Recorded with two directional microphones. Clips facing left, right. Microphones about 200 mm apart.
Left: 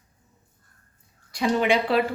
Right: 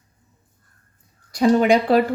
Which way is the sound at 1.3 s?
40° right (ahead or behind).